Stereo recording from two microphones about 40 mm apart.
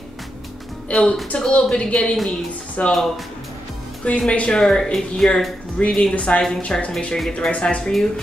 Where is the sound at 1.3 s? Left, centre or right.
Left.